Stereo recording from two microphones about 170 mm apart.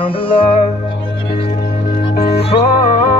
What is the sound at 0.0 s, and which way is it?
Music, 30° left (ahead or behind).